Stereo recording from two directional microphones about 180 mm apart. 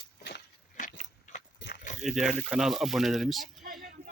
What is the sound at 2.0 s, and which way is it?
Speech, centre (ahead or behind).